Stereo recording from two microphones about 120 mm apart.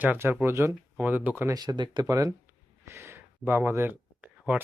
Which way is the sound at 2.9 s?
20° right (ahead or behind).